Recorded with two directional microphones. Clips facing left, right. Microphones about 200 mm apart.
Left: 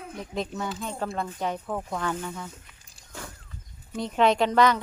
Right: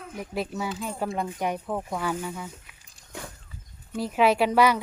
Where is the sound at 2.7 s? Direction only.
5° right (ahead or behind).